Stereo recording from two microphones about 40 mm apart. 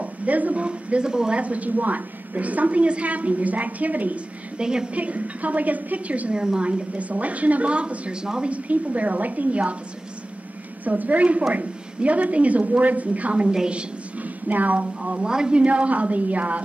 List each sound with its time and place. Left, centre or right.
0.0 s a woman's voice: right
0.7 s speech: right
1.4 s a woman's voice: right
4.6 s speech: centre
4.9 s a woman's voice: right
6.3 s a woman's voice: right
8.5 s a woman's voice: right
10.9 s a woman's voice: right
14.2 s a woman's voice: right
15.0 s speech: right
15.6 s a woman's voice: right